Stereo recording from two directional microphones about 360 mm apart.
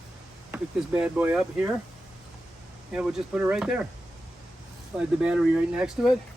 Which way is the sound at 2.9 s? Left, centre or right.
Centre.